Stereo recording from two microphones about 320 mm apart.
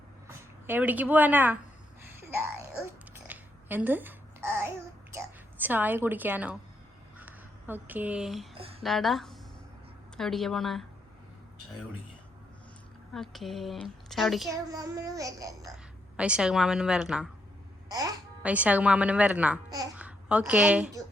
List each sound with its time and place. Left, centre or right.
0.3 s speech: centre
2.1 s a sound: centre
3.2 s babbling: centre
5.1 s a woman's voice: centre
8.5 s a sound: centre
8.8 s speech: centre
13.1 s speech: centre
14.7 s babbling: centre
16.1 s speech: centre